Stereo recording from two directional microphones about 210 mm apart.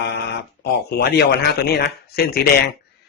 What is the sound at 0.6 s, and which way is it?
A man's voice, 50° left (ahead or behind).